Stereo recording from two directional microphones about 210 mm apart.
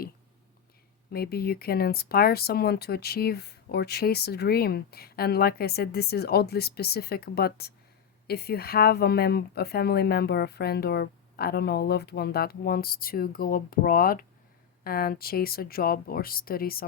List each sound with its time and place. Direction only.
1.1 s speech: 45° left (ahead or behind)